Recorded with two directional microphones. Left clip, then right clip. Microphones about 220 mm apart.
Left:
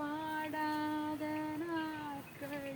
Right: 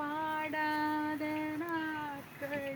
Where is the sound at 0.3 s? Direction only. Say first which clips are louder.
Right 3 dB; 35° right (ahead or behind).